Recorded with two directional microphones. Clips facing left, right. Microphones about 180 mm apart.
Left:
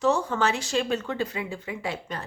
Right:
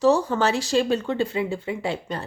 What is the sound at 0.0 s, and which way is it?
Speech, 35° right (ahead or behind).